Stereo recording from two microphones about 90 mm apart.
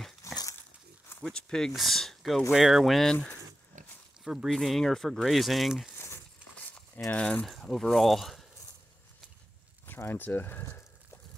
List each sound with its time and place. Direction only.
0.2 s dog: 35° left (ahead or behind)
1.2 s speech: 5° left (ahead or behind)
4.2 s speech: 5° right (ahead or behind)
6.5 s crumpling: 15° left (ahead or behind)
7.1 s speech: 10° left (ahead or behind)
9.8 s speech: 25° left (ahead or behind)